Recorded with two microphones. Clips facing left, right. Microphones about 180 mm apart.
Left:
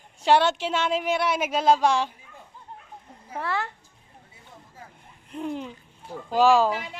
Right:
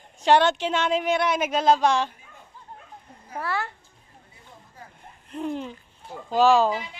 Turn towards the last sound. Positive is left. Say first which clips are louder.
# even
turn(degrees=10)  # may be behind; listen again after turning